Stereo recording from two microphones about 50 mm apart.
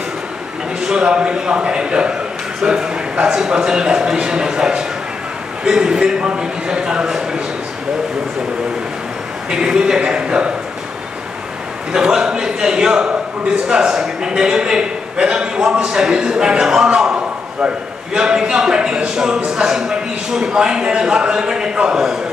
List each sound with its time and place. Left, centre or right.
0.8 s a man's voice: centre
9.5 s a man's voice: centre
11.9 s a man's voice: centre
21.9 s a man's voice: centre